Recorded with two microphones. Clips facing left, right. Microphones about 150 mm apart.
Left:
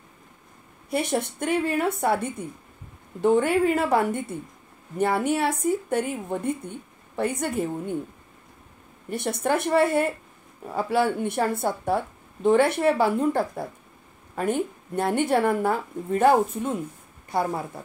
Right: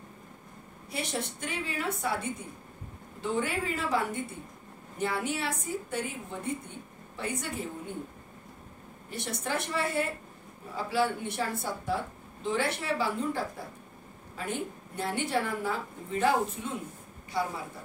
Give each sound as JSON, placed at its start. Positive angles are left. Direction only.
{"t": 0.8, "sound": "a woman's voice", "side_deg": 55}
{"t": 9.1, "sound": "a woman's voice", "side_deg": 50}